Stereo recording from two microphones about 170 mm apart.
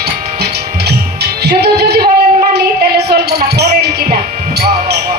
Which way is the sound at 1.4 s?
75° right (ahead or behind).